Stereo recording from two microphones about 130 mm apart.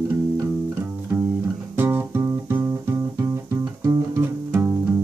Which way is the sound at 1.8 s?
20° right (ahead or behind).